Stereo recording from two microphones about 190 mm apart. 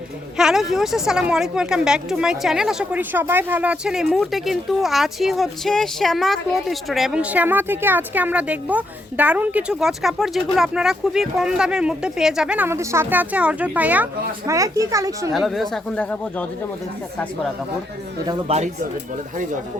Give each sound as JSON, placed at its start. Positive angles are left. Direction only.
{"t": 0.3, "sound": "speech", "side_deg": 0}
{"t": 15.3, "sound": "speech", "side_deg": 0}
{"t": 18.3, "sound": "speech", "side_deg": -35}